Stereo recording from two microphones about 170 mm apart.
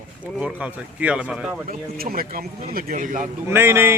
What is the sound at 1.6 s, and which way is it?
A man's voice, 60° right (ahead or behind).